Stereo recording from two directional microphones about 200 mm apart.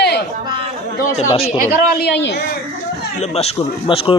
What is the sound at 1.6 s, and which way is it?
Speech, 55° left (ahead or behind).